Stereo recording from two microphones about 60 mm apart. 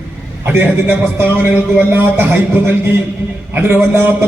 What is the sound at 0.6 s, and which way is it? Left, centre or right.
A man's voice, right.